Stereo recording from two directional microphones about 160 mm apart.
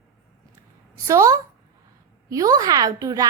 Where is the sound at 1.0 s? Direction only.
20° right (ahead or behind).